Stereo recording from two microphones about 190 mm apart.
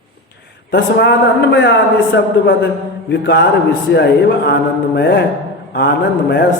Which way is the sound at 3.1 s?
65° left (ahead or behind).